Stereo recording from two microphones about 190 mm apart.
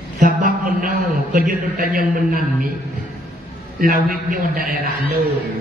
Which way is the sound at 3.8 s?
45° right (ahead or behind).